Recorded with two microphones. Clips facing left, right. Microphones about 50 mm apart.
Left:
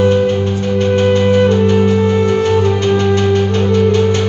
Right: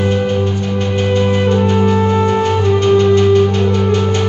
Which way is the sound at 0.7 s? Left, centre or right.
Left.